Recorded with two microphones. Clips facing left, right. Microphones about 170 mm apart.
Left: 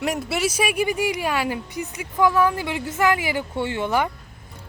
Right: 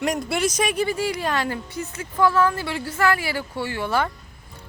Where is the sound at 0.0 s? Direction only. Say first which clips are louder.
Right 1 dB; 5° left (ahead or behind).